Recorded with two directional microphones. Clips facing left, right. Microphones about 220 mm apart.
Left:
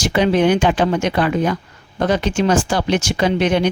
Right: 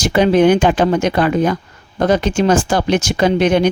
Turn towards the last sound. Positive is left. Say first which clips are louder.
# right 3 dB
turn(degrees=-45)  # may be behind; listen again after turning